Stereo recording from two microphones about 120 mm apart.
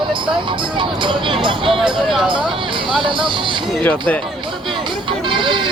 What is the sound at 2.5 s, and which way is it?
Speech, 45° right (ahead or behind).